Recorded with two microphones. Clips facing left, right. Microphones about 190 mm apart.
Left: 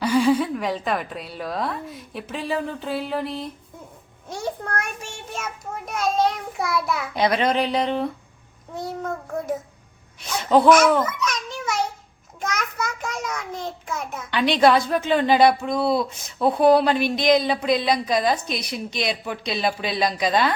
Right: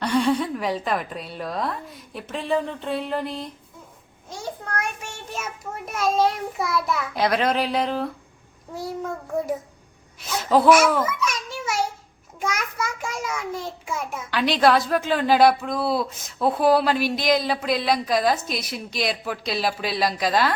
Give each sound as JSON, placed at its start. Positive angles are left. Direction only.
{"t": 0.0, "sound": "a child's voice", "side_deg": 5}
{"t": 4.6, "sound": "child singing", "side_deg": 55}
{"t": 5.3, "sound": "a child's voice", "side_deg": -5}
{"t": 10.2, "sound": "a child's voice", "side_deg": -5}